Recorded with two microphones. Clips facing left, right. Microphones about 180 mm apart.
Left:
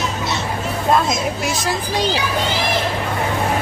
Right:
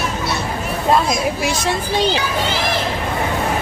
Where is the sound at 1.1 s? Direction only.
Centre (ahead or behind).